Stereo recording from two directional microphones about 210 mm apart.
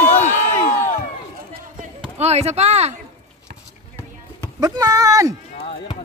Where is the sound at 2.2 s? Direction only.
30° right (ahead or behind).